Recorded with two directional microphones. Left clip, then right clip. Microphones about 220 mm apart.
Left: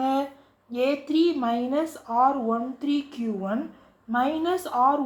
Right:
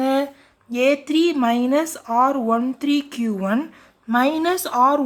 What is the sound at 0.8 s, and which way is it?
A woman's voice, 65° right (ahead or behind).